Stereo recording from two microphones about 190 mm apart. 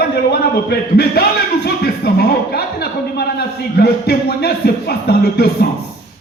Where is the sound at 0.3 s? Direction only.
55° left (ahead or behind).